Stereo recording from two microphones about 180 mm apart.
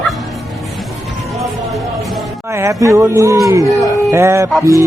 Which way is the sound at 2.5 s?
15° right (ahead or behind).